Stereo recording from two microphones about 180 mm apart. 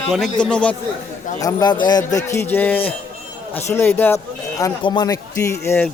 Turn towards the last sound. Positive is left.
turn(degrees=15)  # may be behind; listen again after turning